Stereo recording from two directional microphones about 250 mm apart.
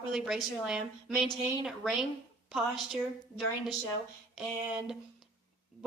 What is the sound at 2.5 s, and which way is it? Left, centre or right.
Speech, centre.